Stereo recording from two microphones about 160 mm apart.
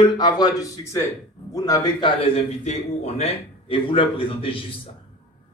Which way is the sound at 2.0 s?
35° left (ahead or behind).